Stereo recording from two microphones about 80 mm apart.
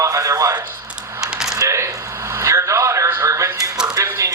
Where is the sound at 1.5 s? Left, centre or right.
Right.